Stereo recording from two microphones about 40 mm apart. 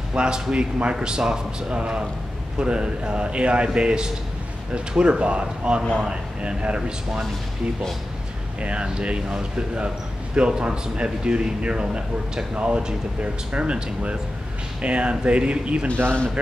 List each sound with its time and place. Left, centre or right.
0.1 s a man's voice: right
0.9 s a man's voice: centre
8.5 s a man's voice: right